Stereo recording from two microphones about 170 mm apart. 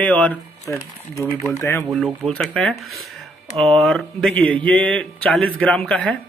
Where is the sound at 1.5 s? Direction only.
15° left (ahead or behind).